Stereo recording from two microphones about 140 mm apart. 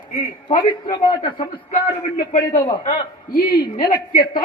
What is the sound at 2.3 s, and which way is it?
Speech, 90° left.